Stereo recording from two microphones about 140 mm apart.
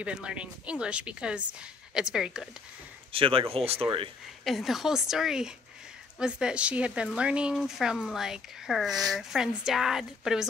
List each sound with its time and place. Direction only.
0.0 s speech: 5° right (ahead or behind)
3.1 s speech: 40° right (ahead or behind)
4.5 s speech: centre (ahead or behind)